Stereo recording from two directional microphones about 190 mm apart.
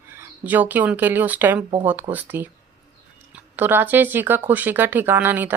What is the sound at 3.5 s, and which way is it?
Speech, 10° right (ahead or behind).